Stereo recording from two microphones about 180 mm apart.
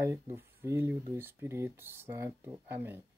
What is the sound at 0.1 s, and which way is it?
Speech, 15° right (ahead or behind).